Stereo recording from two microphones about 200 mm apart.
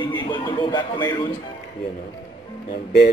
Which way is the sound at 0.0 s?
25° left (ahead or behind).